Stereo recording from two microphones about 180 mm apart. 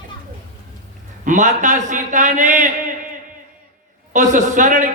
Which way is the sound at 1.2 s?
45° right (ahead or behind).